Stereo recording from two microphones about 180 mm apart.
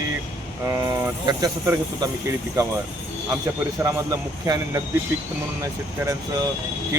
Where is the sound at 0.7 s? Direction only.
20° right (ahead or behind).